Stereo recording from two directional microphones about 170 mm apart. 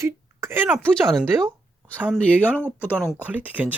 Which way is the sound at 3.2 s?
10° right (ahead or behind).